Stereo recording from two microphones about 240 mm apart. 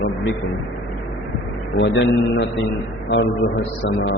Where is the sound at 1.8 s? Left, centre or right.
Left.